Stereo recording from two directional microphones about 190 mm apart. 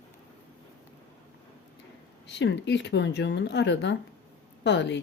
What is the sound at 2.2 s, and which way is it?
Speech, 65° left (ahead or behind).